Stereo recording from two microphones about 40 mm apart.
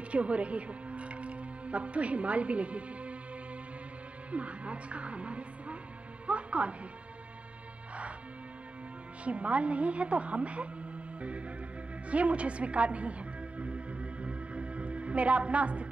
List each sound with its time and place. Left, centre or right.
0.1 s speech: right
4.3 s speech: right
6.2 s music: right
9.2 s a woman's voice: right
12.1 s music: right